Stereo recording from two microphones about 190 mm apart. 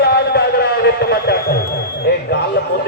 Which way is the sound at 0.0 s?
60° left (ahead or behind).